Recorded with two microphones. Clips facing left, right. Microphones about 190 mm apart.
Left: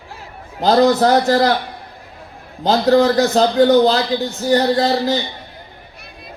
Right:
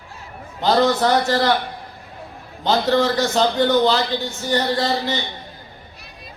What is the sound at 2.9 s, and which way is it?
A man's voice, 35° left (ahead or behind).